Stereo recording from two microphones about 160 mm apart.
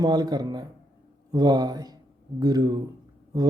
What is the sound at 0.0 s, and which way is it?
Speech, 25° right (ahead or behind).